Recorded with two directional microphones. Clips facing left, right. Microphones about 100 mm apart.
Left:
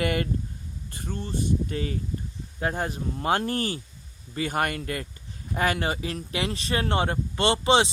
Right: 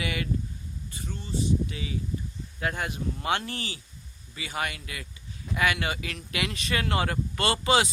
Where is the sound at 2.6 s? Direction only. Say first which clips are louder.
Left 3 dB; 35° left (ahead or behind).